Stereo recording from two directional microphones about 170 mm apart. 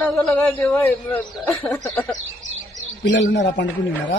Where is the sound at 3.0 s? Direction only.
90° left.